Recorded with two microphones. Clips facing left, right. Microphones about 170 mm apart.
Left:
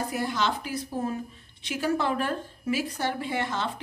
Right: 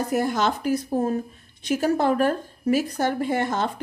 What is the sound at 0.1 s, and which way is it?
A woman's voice, 45° right (ahead or behind).